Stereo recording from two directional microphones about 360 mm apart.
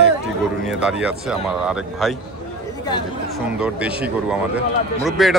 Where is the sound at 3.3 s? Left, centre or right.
Centre.